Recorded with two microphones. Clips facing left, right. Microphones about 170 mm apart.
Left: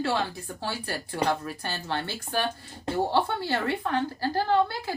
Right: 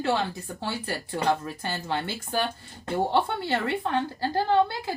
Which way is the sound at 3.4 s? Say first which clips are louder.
Right 1 dB; 20° right (ahead or behind).